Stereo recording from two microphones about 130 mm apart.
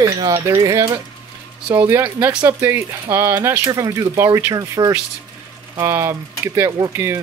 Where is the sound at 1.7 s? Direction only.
15° right (ahead or behind).